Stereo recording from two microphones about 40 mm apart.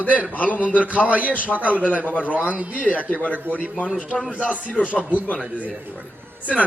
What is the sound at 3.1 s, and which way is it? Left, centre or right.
Speech, left.